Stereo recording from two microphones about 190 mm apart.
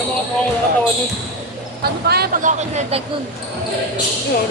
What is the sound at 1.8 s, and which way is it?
Speech, 55° right (ahead or behind).